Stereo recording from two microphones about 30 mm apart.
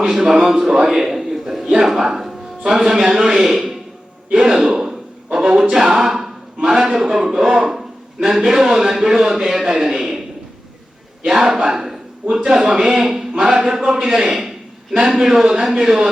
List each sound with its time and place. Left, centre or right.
0.0 s speech: centre
0.9 s a sound: centre
1.8 s speech: centre
2.1 s music: centre
3.0 s speech: centre
4.4 s a sound: centre
5.7 s a man's voice: centre
11.3 s a man's voice: centre
14.9 s speech: right
15.2 s speech: centre